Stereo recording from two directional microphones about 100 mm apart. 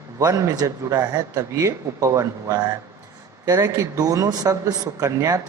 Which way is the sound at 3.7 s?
35° right (ahead or behind).